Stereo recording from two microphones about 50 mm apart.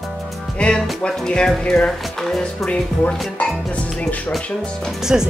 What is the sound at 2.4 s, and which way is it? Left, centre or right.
Speech, centre.